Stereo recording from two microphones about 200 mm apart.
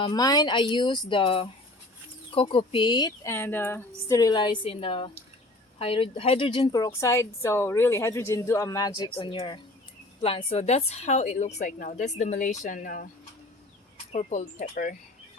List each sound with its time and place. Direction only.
0.0 s a woman's voice: 20° left (ahead or behind); by 13.1 s 45° left (ahead or behind)
14.1 s a woman's voice: 35° left (ahead or behind)